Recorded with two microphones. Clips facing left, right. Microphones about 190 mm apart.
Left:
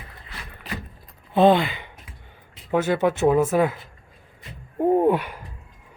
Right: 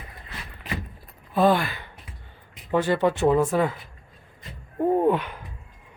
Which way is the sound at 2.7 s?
5° left (ahead or behind).